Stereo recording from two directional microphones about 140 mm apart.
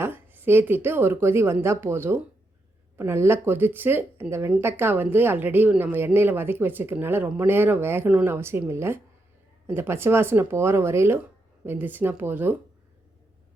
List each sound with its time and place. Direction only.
0.0 s a woman's voice: 15° right (ahead or behind)